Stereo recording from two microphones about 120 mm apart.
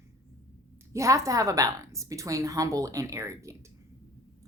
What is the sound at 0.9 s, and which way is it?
A woman's voice, 25° right (ahead or behind).